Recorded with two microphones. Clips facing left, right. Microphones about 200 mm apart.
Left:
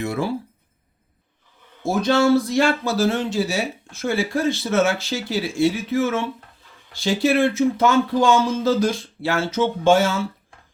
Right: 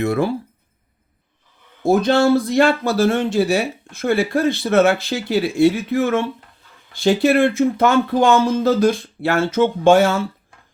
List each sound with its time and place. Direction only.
0.0 s speech: 60° right (ahead or behind)
1.8 s speech: 55° right (ahead or behind)